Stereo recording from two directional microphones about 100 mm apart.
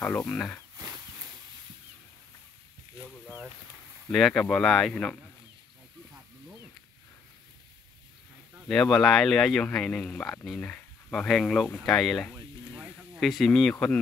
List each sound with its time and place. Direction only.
0.0 s speech: 20° left (ahead or behind)
4.1 s speech: 5° left (ahead or behind)
8.6 s speech: 5° left (ahead or behind)